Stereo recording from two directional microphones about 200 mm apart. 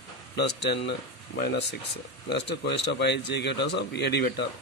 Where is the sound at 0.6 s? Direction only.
60° left (ahead or behind).